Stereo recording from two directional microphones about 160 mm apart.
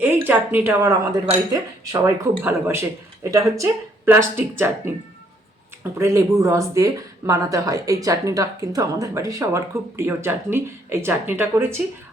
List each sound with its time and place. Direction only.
0.0 s speech: 10° right (ahead or behind)
5.8 s speech: 15° right (ahead or behind)